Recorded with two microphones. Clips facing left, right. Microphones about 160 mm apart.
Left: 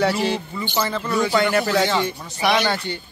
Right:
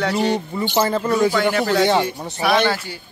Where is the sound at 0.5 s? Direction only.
40° right (ahead or behind).